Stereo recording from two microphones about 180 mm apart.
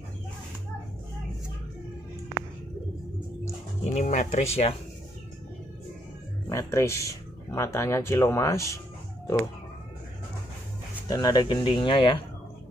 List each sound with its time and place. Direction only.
3.8 s speech: 40° left (ahead or behind)
6.5 s speech: 15° left (ahead or behind)
11.1 s speech: 20° left (ahead or behind)